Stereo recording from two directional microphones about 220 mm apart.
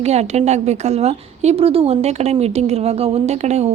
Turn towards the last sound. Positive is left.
turn(degrees=-30)  # may be behind; listen again after turning